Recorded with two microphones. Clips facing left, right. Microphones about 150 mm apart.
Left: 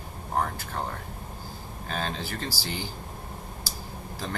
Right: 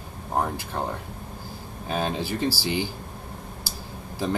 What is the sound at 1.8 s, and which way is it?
Speech, 15° right (ahead or behind).